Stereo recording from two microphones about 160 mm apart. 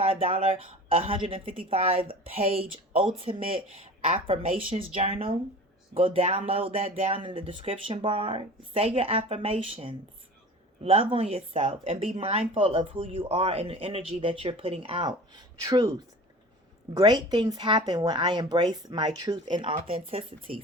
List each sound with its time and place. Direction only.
0.0 s speech: 35° right (ahead or behind)